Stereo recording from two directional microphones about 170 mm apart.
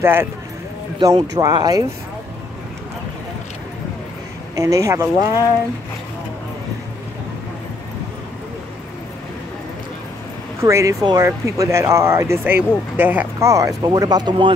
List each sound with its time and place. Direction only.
0.0 s speech: 15° right (ahead or behind)
4.6 s speech: 20° right (ahead or behind)
10.6 s speech: 15° right (ahead or behind)